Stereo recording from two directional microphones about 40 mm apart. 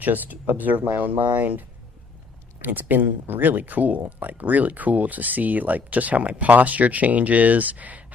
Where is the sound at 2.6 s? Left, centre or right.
Right.